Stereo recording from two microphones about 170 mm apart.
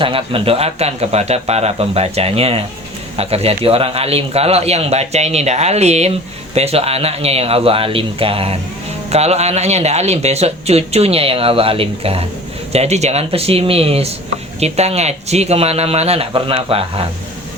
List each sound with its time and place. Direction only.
0.0 s a man's voice: 30° right (ahead or behind)